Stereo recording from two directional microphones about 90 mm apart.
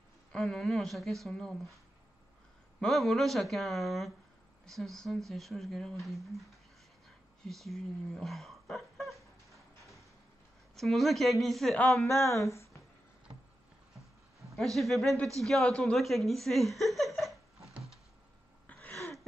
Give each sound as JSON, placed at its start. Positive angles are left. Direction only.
{"t": 0.3, "sound": "speech", "side_deg": 5}
{"t": 2.8, "sound": "speech", "side_deg": 0}
{"t": 7.4, "sound": "a sound", "side_deg": 5}
{"t": 10.8, "sound": "speech", "side_deg": 0}
{"t": 12.1, "sound": "a sound", "side_deg": 35}
{"t": 14.5, "sound": "speech", "side_deg": 0}